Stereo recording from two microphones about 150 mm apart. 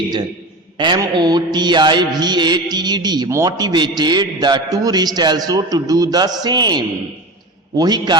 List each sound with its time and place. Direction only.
0.8 s music: 30° right (ahead or behind)